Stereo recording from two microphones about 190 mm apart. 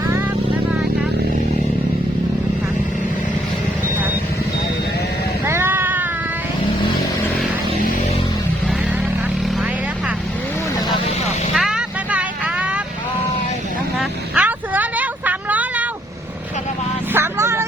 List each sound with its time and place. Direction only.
5.5 s a sound: 10° right (ahead or behind)
11.5 s vehicle: 5° right (ahead or behind)
14.0 s vehicle: 10° right (ahead or behind)
17.2 s vehicle: 15° right (ahead or behind)